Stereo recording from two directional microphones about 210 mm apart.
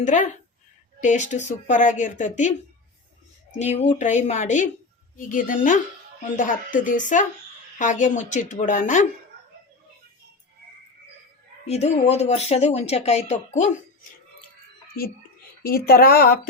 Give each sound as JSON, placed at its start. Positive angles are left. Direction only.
{"t": 0.0, "sound": "speech", "side_deg": 35}
{"t": 3.6, "sound": "speech", "side_deg": 35}
{"t": 11.6, "sound": "speech", "side_deg": 30}
{"t": 15.6, "sound": "speech", "side_deg": 45}